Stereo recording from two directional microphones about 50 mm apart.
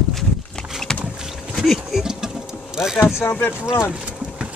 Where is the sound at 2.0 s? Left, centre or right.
Centre.